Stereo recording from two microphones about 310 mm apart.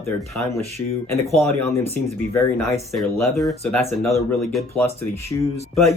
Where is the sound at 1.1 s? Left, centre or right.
Centre.